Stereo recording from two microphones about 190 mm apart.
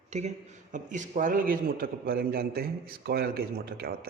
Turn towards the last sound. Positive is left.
turn(degrees=-55)  # may be behind; listen again after turning